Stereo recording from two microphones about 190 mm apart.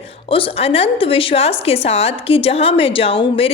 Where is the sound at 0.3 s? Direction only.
30° left (ahead or behind).